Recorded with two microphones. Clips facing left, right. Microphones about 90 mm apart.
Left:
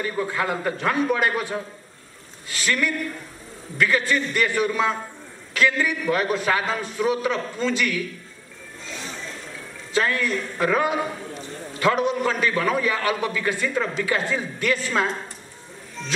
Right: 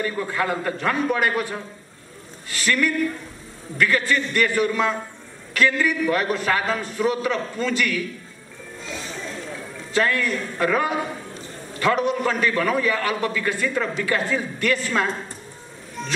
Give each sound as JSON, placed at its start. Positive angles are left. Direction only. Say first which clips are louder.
{"t": 0.0, "sound": "a man's voice", "louder": "right 1 dB", "side_deg": 5}
{"t": 2.6, "sound": "a man's voice", "louder": "right 3 dB", "side_deg": 5}
{"t": 9.9, "sound": "a man's voice", "louder": "right 1 dB", "side_deg": 5}